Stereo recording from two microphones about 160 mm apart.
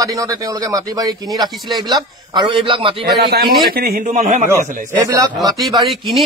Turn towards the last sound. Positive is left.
turn(degrees=0)  # may be behind; listen again after turning